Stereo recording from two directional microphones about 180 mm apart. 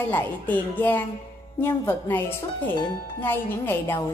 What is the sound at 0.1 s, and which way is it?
A woman's voice, 10° left (ahead or behind).